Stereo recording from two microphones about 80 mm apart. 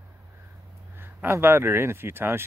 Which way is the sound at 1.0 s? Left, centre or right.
Right.